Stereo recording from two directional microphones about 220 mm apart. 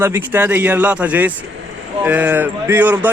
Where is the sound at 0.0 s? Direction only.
10° right (ahead or behind).